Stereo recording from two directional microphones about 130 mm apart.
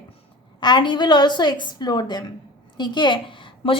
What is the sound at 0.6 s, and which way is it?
A woman's voice, 35° left (ahead or behind).